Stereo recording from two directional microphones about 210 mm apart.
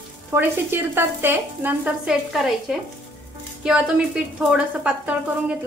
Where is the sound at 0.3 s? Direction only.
10° right (ahead or behind).